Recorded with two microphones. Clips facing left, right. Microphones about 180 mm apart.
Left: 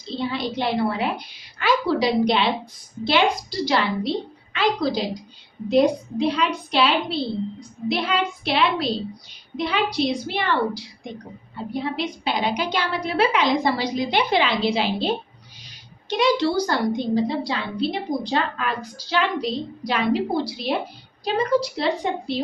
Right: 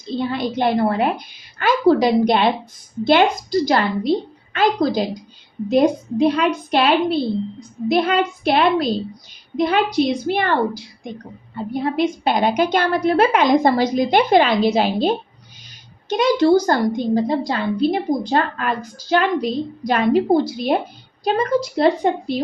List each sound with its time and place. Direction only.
0.0 s a woman's voice: 50° right (ahead or behind)